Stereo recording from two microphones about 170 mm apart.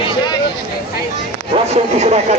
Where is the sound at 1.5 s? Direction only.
40° right (ahead or behind).